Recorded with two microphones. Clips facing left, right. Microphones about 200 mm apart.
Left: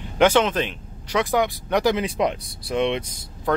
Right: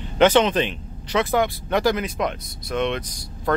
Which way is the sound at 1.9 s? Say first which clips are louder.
Left 2 dB; 30° left (ahead or behind).